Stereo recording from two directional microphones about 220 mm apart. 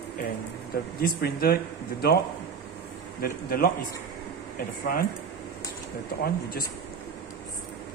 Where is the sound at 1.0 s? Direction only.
45° left (ahead or behind).